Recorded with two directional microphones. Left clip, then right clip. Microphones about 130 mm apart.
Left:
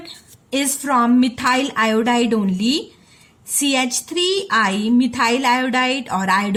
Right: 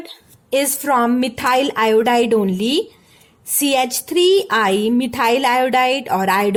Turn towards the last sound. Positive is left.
turn(degrees=-55)  # may be behind; listen again after turning